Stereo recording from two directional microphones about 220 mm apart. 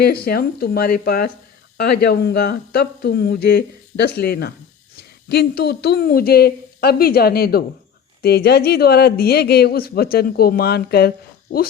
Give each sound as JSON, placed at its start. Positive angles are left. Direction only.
{"t": 0.0, "sound": "a man's voice", "side_deg": 45}